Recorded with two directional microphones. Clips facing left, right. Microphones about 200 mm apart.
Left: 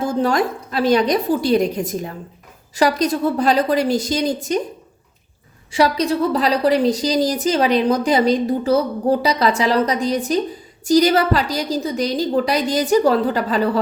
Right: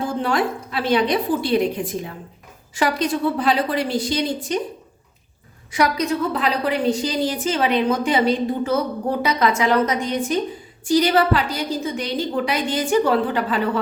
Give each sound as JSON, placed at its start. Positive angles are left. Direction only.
{"t": 0.0, "sound": "a woman's voice", "side_deg": 40}
{"t": 5.7, "sound": "a woman's voice", "side_deg": 30}